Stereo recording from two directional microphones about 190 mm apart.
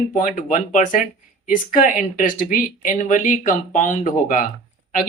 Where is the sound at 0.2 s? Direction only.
40° left (ahead or behind).